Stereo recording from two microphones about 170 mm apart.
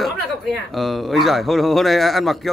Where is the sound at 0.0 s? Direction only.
Centre (ahead or behind).